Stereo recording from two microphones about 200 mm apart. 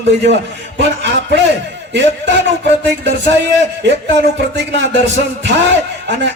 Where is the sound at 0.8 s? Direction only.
60° right (ahead or behind).